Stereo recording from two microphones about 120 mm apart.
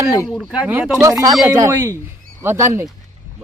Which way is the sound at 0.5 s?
15° right (ahead or behind).